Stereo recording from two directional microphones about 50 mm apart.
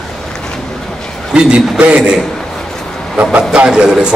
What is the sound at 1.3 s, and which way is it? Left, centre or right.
Speech, right.